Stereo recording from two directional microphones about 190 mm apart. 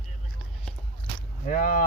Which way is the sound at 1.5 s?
45° left (ahead or behind).